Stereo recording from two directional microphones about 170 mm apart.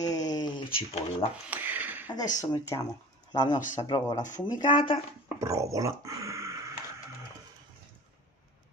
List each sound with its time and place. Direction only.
0.0 s a sound: 20° left (ahead or behind)
0.7 s speech: 35° left (ahead or behind)
1.5 s a sound: 10° right (ahead or behind)
2.5 s speech: 25° left (ahead or behind)
3.5 s speech: 50° left (ahead or behind)
3.8 s speech: 25° left (ahead or behind)
4.2 s speech: 45° left (ahead or behind)
4.6 s speech: 30° left (ahead or behind)
5.4 s speech: 20° right (ahead or behind)